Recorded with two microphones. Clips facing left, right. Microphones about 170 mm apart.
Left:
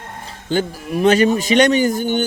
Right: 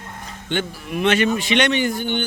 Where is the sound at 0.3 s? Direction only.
35° left (ahead or behind).